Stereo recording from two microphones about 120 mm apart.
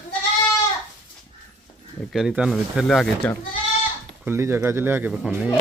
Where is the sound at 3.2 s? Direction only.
10° left (ahead or behind).